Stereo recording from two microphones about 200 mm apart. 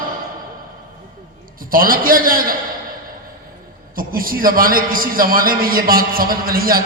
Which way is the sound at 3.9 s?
45° right (ahead or behind).